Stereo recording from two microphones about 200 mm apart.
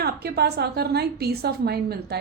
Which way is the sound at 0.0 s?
55° right (ahead or behind).